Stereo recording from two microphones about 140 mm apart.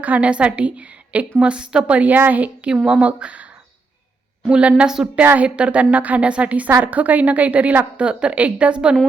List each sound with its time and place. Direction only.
0.0 s a woman's voice: 10° right (ahead or behind)